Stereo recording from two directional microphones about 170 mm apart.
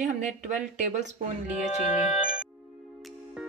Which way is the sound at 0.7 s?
45° right (ahead or behind).